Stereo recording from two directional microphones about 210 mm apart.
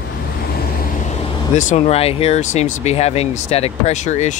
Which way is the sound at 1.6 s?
35° left (ahead or behind).